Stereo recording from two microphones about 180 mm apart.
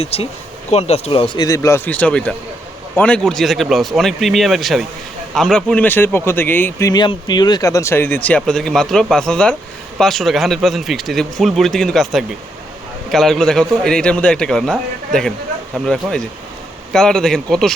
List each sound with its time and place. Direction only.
0.0 s a man's voice: 35° left (ahead or behind); by 17.7 s 5° left (ahead or behind)